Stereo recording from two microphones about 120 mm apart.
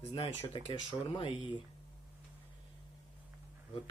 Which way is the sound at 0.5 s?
45° left (ahead or behind).